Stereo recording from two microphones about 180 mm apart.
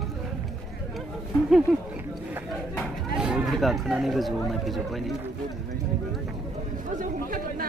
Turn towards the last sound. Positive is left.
turn(degrees=-50)  # may be behind; listen again after turning